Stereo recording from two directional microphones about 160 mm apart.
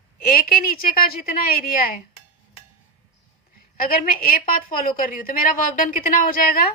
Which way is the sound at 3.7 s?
65° left (ahead or behind).